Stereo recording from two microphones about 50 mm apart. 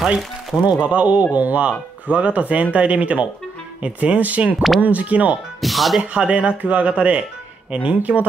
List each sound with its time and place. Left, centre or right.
0.0 s speech: centre
0.8 s speech: right
5.6 s speech: centre
5.9 s speech: right